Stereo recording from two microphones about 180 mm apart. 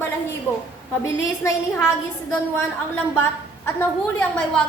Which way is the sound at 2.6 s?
10° left (ahead or behind).